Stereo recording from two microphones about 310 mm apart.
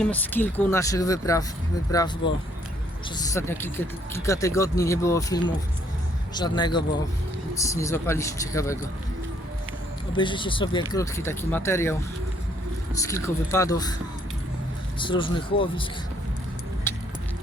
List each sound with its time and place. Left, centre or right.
0.0 s speech: centre
10.1 s speech: centre
13.0 s speech: centre
14.9 s speech: centre
16.9 s keys jangling: centre